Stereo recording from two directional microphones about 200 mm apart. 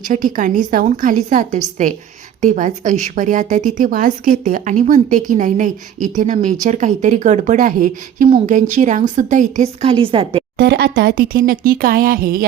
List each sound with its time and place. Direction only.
0.1 s a woman's voice: 40° right (ahead or behind)
10.6 s speech: 55° right (ahead or behind)